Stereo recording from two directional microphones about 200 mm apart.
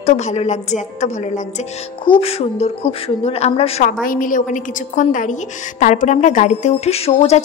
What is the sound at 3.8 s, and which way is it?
A woman's voice, 45° left (ahead or behind).